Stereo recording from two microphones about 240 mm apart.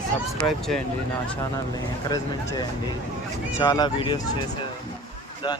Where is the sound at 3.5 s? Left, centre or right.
Centre.